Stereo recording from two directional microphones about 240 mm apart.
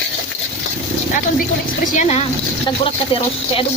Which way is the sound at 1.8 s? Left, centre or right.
Left.